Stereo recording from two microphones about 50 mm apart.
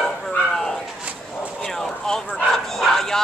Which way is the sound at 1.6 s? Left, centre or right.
Centre.